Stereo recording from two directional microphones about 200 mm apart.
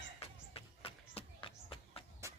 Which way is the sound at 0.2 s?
30° left (ahead or behind).